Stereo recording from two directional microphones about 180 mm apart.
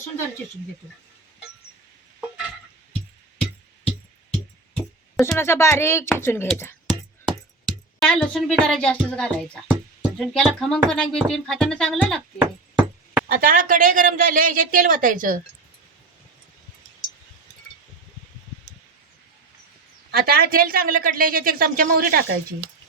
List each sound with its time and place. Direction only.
3.8 s music: 5° left (ahead or behind)
5.4 s speech: 15° left (ahead or behind)
6.8 s a sound: centre (ahead or behind)
9.6 s speech: centre (ahead or behind)
12.4 s knock: 5° right (ahead or behind)
13.2 s a woman's voice: 50° right (ahead or behind)
20.1 s a woman's voice: 60° right (ahead or behind)